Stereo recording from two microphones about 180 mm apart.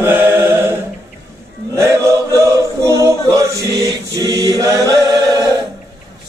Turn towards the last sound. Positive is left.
turn(degrees=-20)  # may be behind; listen again after turning